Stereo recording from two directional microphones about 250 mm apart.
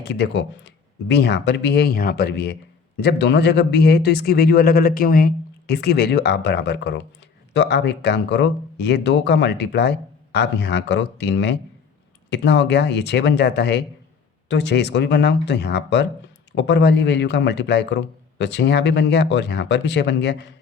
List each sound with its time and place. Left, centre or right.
0.0 s speech: left